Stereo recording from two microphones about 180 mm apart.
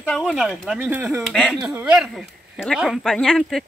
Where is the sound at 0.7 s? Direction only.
10° right (ahead or behind).